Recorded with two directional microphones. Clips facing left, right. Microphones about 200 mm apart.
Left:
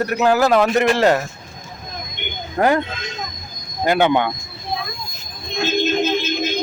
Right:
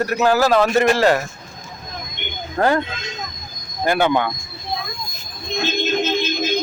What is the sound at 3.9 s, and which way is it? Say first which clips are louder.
Speech: left 1 dB; 20° left (ahead or behind).